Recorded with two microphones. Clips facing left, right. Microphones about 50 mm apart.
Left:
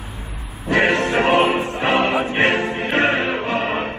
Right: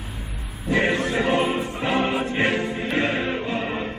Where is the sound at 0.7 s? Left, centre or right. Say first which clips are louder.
Left 4 dB; left.